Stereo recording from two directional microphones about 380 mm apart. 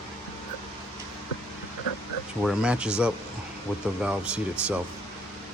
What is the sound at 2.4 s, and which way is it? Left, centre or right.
Speech, centre.